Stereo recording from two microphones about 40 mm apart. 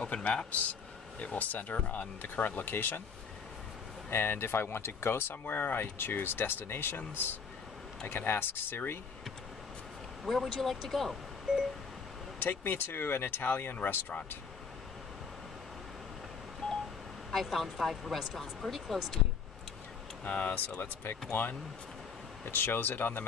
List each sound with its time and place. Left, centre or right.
0.0 s a man's voice: left
4.1 s speech: left
5.4 s speech: left
8.1 s speech: left
10.2 s speech: centre
11.5 s a sound: centre
12.4 s speech: left
17.3 s speech: centre
20.2 s a man's voice: left
20.7 s speech: left
21.3 s speech: left
22.4 s speech: left